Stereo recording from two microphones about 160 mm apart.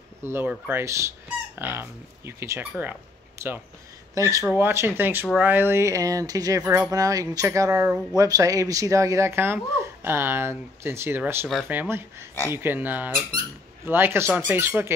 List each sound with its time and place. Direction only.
0.2 s speech: 15° right (ahead or behind)